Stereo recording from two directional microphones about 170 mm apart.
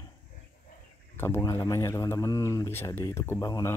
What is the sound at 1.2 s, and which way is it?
Speech, 15° left (ahead or behind).